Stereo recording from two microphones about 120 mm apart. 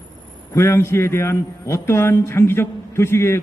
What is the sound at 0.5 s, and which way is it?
A man's voice, 20° left (ahead or behind).